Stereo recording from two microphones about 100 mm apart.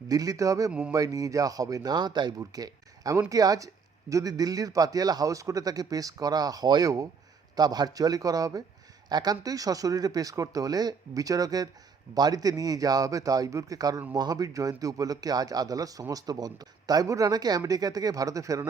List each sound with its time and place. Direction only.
0.1 s speech: 35° right (ahead or behind)
0.7 s speech: 10° right (ahead or behind)
0.9 s speech: 35° right (ahead or behind)